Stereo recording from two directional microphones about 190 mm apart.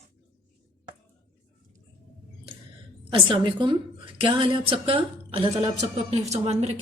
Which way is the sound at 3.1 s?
25° right (ahead or behind).